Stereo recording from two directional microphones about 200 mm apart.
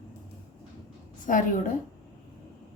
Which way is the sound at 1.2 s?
40° left (ahead or behind).